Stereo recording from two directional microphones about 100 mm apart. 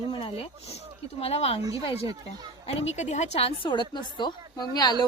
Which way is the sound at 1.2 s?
85° left.